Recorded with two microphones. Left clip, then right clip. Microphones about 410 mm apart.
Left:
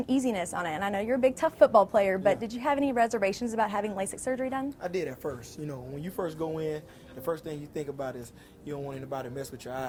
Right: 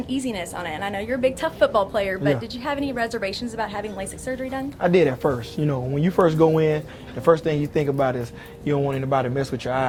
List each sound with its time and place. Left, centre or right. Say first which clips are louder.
0.1 s a woman's voice: right 1 dB; left
4.8 s speech: right 14 dB; right